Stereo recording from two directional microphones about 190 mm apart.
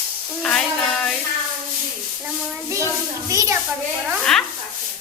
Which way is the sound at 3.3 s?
15° right (ahead or behind).